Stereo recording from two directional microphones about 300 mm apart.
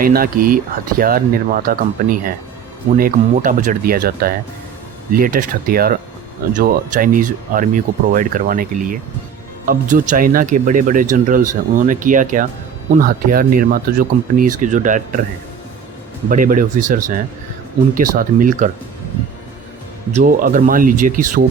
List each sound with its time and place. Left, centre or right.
0.0 s speech: right
16.3 s speech: right
20.1 s speech: right